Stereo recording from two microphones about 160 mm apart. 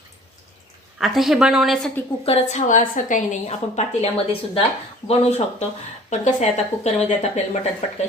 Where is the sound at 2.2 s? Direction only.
40° left (ahead or behind).